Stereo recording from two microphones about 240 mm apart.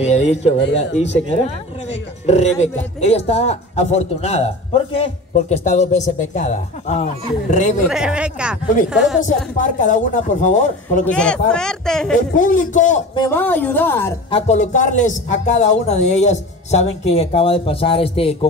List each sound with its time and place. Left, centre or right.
0.0 s a man's voice: left
0.6 s speech: left
1.9 s a man's voice: left
7.9 s speech: centre
9.2 s a woman's voice: left
11.1 s speech: centre
12.2 s a woman's voice: left
13.1 s a woman's voice: centre
14.3 s a man's voice: left